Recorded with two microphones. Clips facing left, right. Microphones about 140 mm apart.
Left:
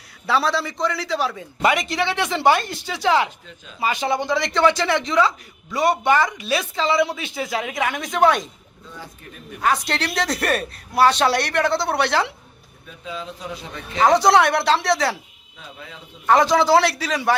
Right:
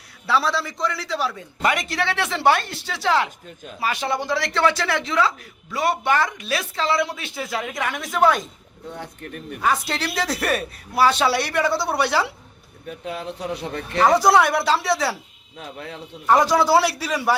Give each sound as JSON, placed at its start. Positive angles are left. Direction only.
{"t": 0.3, "sound": "speech", "side_deg": 0}
{"t": 8.9, "sound": "speech", "side_deg": -60}
{"t": 9.6, "sound": "speech", "side_deg": -5}
{"t": 13.1, "sound": "speech", "side_deg": -65}
{"t": 14.1, "sound": "speech", "side_deg": -10}
{"t": 15.5, "sound": "speech", "side_deg": -65}
{"t": 16.2, "sound": "speech", "side_deg": -10}